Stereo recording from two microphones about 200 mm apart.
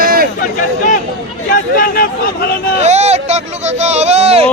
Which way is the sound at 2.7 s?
35° right (ahead or behind).